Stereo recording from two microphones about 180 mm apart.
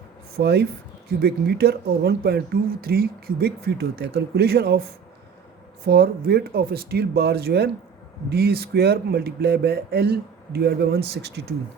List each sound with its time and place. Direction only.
0.3 s speech: 65° right (ahead or behind)